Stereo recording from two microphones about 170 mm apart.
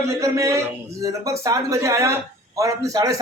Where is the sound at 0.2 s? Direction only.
15° right (ahead or behind).